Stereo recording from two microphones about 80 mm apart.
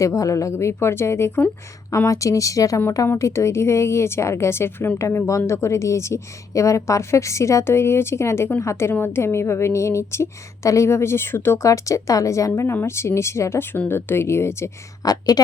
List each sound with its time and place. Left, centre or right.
0.0 s a woman's voice: left
15.0 s speech: left